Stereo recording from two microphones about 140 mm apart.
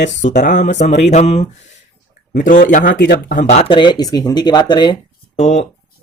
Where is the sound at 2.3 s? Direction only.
70° left (ahead or behind); by 3.4 s 85° left.